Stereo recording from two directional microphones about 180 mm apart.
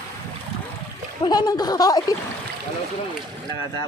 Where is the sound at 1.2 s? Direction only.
25° left (ahead or behind).